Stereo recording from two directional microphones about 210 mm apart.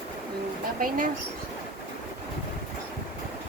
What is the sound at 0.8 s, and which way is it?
Speech, 40° right (ahead or behind).